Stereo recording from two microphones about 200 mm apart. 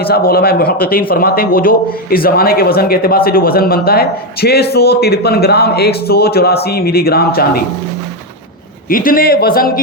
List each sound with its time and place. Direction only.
0.0 s speech: 50° left (ahead or behind)
8.9 s speech: 45° left (ahead or behind)